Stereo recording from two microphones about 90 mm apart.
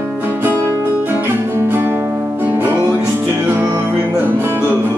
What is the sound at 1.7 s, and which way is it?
Music, 25° right (ahead or behind).